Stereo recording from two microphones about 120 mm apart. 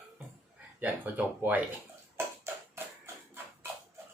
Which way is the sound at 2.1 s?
20° right (ahead or behind).